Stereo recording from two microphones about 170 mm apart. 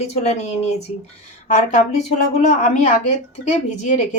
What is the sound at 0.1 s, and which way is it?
A woman's voice, 40° left (ahead or behind).